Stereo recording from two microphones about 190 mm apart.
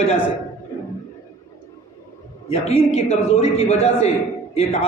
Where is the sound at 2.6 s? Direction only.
35° left (ahead or behind).